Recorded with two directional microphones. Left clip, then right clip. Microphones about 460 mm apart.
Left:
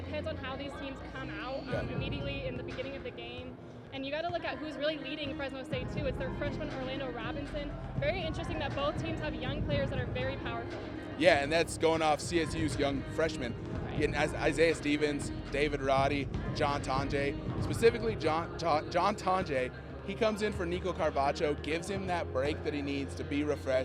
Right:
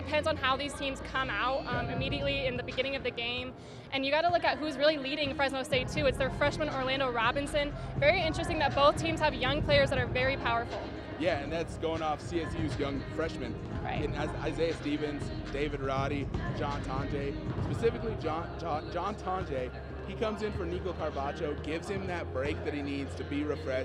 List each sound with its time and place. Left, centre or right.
0.1 s a woman's voice: right
11.2 s speech: left